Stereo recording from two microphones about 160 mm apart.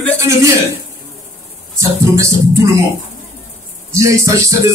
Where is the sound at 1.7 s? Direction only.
20° right (ahead or behind).